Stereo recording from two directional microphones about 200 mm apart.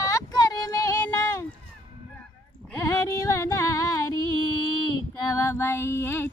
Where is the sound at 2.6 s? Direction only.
15° left (ahead or behind).